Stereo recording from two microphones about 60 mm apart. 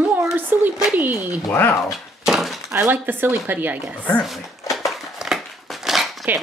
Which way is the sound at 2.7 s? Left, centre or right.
Right.